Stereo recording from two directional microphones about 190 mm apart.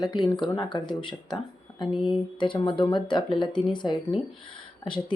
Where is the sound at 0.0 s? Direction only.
25° left (ahead or behind).